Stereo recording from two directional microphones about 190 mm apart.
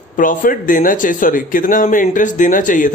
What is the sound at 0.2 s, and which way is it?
Speech, 45° left (ahead or behind).